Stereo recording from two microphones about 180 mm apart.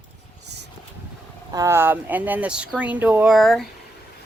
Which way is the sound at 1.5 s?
15° right (ahead or behind).